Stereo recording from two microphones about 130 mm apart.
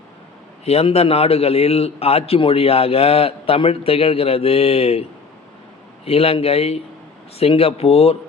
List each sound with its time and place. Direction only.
0.6 s a man's voice: 50° left (ahead or behind)
6.1 s a man's voice: 50° left (ahead or behind)